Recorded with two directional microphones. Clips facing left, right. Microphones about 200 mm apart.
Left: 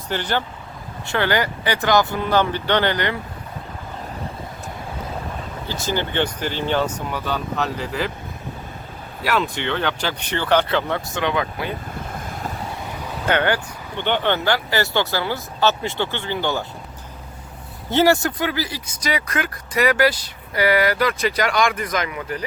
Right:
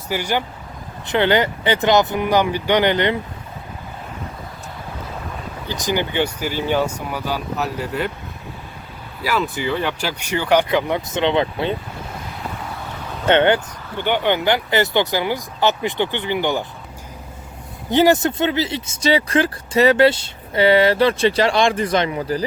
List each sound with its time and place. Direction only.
0.1 s speech: 10° right (ahead or behind)
5.6 s speech: 15° right (ahead or behind)
9.2 s speech: centre (ahead or behind); by 11.7 s 25° right (ahead or behind)
12.2 s vehicle: 50° left (ahead or behind)
13.2 s speech: 25° right (ahead or behind)
14.0 s speech: 10° right (ahead or behind)
17.9 s speech: 20° right (ahead or behind)